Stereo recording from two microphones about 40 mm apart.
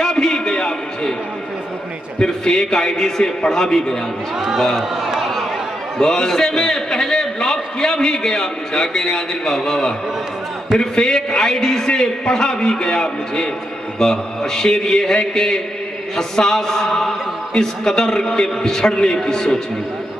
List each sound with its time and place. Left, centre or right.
0.0 s a sound: centre
2.1 s a man's voice: centre
4.7 s a man's voice: centre
5.9 s a man's voice: centre